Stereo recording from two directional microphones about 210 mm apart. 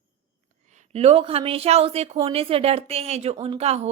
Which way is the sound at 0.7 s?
35° right (ahead or behind).